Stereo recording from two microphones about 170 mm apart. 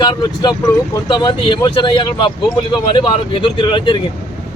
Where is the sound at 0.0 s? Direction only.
25° left (ahead or behind).